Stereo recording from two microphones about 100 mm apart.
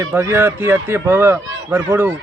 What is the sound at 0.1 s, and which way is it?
A man's voice, 25° right (ahead or behind).